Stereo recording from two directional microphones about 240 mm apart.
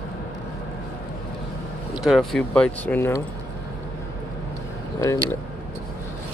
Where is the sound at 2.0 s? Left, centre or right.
Centre.